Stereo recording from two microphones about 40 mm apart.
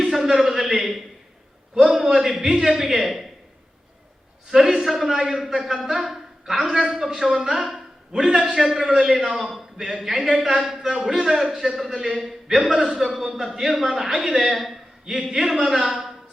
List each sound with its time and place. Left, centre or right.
0.0 s a sound: centre
1.7 s a man's voice: centre
4.5 s a man's voice: centre
11.4 s a man's voice: right
11.7 s a man's voice: centre